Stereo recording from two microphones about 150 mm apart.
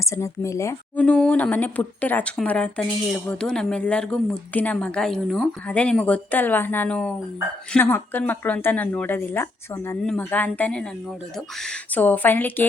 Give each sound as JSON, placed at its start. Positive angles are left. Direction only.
{"t": 0.0, "sound": "speech", "side_deg": 20}
{"t": 0.9, "sound": "speech", "side_deg": 5}